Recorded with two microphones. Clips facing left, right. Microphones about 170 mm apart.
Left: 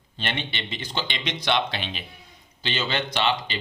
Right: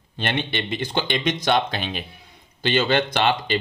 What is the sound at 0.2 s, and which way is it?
Speech, 50° right (ahead or behind).